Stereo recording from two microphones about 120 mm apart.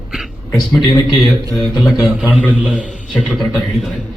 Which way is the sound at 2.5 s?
10° right (ahead or behind).